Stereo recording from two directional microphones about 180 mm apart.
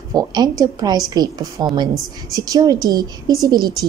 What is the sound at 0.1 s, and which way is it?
Speech, 20° right (ahead or behind).